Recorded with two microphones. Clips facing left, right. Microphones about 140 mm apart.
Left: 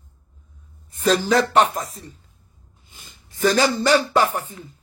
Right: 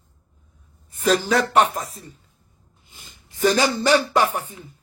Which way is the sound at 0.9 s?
10° right (ahead or behind).